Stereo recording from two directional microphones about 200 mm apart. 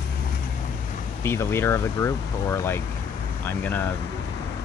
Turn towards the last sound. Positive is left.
turn(degrees=10)  # may be behind; listen again after turning